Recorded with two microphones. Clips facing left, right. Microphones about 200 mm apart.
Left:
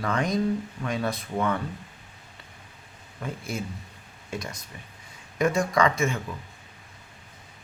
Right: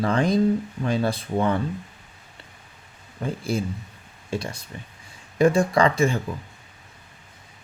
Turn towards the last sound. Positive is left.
turn(degrees=-30)  # may be behind; listen again after turning